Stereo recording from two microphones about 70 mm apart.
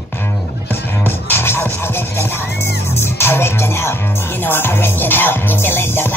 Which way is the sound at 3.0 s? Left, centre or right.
Left.